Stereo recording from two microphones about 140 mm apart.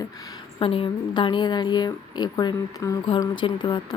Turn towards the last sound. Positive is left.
turn(degrees=30)  # may be behind; listen again after turning